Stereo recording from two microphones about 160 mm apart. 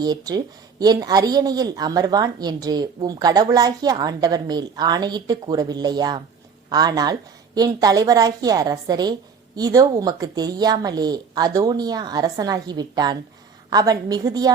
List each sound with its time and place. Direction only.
0.0 s speech: 25° right (ahead or behind)